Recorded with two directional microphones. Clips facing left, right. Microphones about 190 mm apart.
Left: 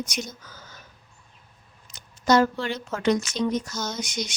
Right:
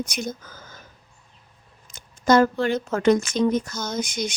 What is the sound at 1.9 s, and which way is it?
Speech, 50° right (ahead or behind).